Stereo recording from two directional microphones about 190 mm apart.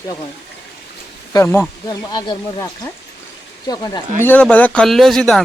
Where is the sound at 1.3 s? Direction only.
15° left (ahead or behind).